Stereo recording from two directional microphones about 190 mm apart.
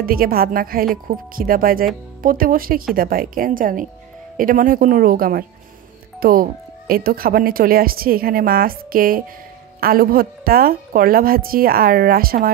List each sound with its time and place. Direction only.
0.0 s speech: 50° right (ahead or behind)